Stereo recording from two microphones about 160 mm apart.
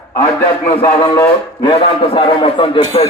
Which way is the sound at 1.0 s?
35° left (ahead or behind).